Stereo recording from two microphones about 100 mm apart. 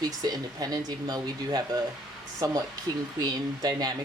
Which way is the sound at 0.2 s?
40° right (ahead or behind).